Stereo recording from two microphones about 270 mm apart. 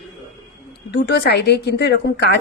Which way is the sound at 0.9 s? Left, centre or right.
Left.